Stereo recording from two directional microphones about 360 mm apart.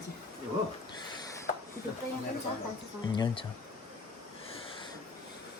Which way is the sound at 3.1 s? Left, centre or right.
Centre.